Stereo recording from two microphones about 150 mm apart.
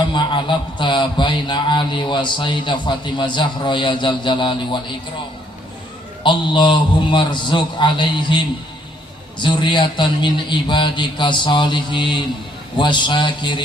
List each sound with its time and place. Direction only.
0.1 s a man's voice: 30° left (ahead or behind)
6.2 s a man's voice: 30° left (ahead or behind)
9.4 s a man's voice: 30° left (ahead or behind)